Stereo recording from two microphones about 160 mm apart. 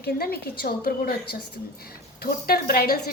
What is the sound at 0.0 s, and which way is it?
A woman's voice, 75° left (ahead or behind).